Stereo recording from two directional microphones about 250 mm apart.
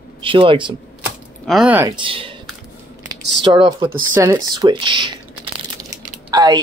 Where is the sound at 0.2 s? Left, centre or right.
Right.